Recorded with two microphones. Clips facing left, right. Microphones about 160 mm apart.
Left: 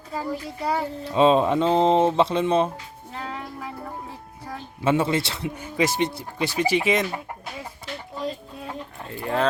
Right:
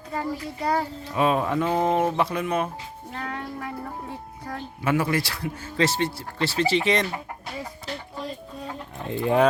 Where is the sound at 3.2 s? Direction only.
5° left (ahead or behind).